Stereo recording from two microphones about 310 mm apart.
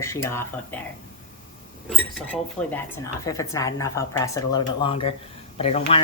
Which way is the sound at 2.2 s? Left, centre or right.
Centre.